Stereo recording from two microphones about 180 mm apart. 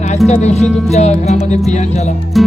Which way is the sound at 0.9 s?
40° left (ahead or behind).